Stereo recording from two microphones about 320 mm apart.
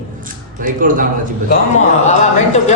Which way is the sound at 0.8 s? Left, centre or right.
Right.